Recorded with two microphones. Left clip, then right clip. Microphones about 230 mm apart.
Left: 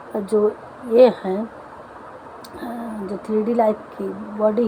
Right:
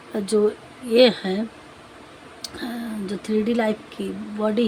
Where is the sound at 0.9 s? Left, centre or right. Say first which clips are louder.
Left 3 dB; right.